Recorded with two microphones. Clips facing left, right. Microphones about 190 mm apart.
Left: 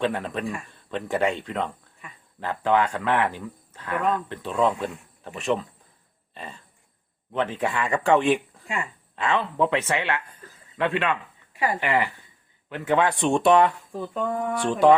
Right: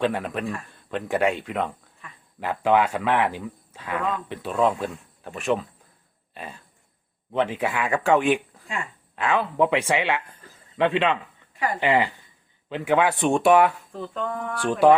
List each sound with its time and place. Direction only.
0.0 s speech: centre (ahead or behind)
6.3 s a sound: centre (ahead or behind)
7.3 s speech: 10° right (ahead or behind)
12.8 s speech: 10° right (ahead or behind)